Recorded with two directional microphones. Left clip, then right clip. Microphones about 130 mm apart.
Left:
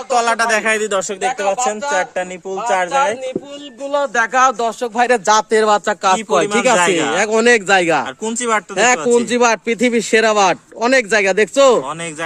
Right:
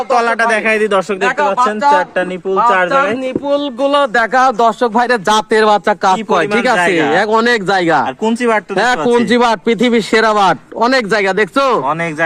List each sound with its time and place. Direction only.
0.1 s speech: 5° left (ahead or behind)
2.6 s speech: 10° right (ahead or behind)
3.9 s speech: 45° right (ahead or behind)
6.7 s speech: 20° left (ahead or behind)
7.7 s speech: 10° right (ahead or behind)
8.2 s speech: 15° left (ahead or behind)
8.8 s speech: 15° right (ahead or behind)